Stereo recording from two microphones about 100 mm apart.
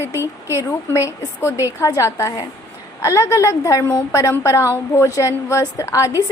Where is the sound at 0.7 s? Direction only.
30° left (ahead or behind).